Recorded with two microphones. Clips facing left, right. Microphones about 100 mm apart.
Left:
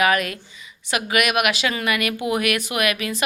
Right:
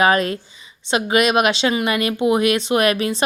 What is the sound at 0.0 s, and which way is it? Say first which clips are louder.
Speech: right 4 dB; 30° right (ahead or behind).